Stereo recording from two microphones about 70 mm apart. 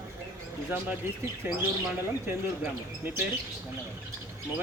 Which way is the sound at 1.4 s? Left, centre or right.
Right.